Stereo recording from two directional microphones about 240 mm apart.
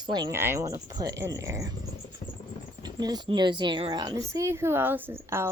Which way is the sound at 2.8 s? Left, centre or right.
Centre.